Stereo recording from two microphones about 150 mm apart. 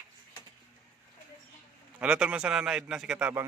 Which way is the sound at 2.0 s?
10° right (ahead or behind).